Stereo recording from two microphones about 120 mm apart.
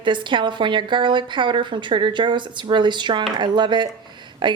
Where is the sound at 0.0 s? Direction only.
40° right (ahead or behind).